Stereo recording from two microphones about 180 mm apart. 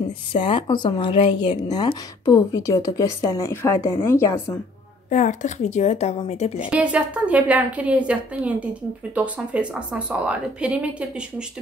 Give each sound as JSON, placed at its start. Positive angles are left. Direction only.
{"t": 0.3, "sound": "speech", "side_deg": 25}
{"t": 5.1, "sound": "a woman's voice", "side_deg": 45}
{"t": 6.7, "sound": "speech", "side_deg": -5}